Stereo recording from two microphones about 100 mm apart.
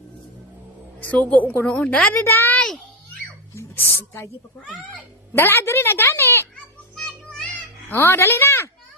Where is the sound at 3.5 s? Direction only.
25° left (ahead or behind).